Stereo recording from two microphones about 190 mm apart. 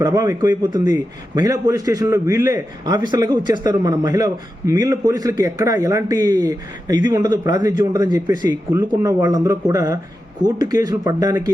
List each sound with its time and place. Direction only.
0.0 s a man's voice: 20° right (ahead or behind)